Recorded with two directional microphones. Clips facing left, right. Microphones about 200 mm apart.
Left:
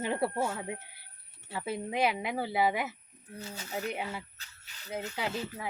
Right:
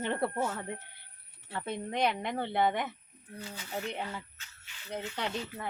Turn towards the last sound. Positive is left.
turn(degrees=5)  # may be behind; listen again after turning